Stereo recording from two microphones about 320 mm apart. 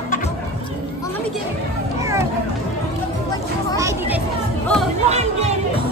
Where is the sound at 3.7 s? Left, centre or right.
Centre.